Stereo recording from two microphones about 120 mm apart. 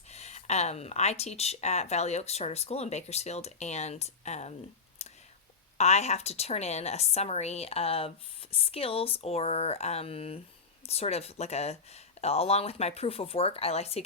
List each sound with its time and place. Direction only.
0.1 s a woman's voice: 65° left (ahead or behind)
5.0 s whispering: 65° left (ahead or behind)
5.7 s a woman's voice: 65° left (ahead or behind)